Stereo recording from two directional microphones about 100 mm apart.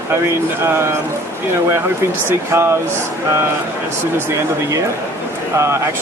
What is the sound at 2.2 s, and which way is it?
Speech, 25° right (ahead or behind).